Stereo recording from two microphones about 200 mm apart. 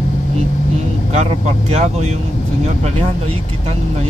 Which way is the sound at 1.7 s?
35° right (ahead or behind).